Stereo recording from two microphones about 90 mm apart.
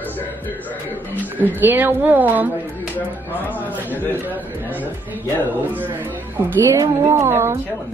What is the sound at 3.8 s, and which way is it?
Speech, 20° left (ahead or behind).